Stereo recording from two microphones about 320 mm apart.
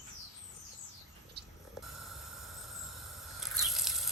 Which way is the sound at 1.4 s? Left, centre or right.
Right.